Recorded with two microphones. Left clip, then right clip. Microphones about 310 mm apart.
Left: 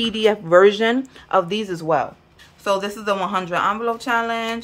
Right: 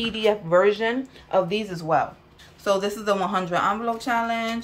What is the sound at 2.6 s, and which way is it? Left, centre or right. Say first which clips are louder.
Speech: left 2 dB; centre.